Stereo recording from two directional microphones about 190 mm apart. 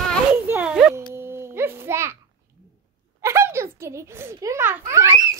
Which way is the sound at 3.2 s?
15° right (ahead or behind).